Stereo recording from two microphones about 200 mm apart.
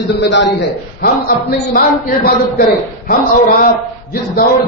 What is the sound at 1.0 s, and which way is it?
Speech, 45° left (ahead or behind).